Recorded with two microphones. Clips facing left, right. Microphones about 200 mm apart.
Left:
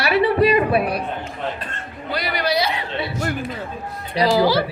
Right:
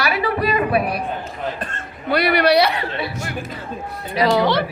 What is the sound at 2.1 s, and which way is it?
Speech, 65° right (ahead or behind).